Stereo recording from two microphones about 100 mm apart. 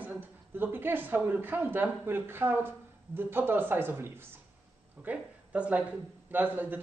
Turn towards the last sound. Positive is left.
turn(degrees=-15)  # may be behind; listen again after turning